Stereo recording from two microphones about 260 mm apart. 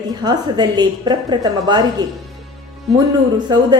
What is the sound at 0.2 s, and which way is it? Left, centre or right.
A woman's voice, centre.